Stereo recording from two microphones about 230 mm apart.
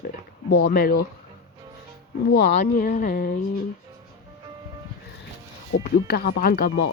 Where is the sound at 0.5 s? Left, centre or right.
Left.